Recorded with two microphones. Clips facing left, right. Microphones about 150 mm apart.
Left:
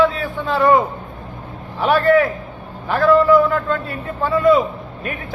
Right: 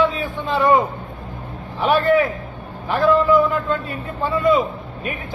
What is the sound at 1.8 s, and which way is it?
Speech, 15° right (ahead or behind).